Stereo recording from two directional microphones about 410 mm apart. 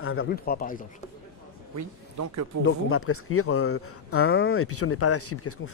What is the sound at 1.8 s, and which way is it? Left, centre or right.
Speech, right.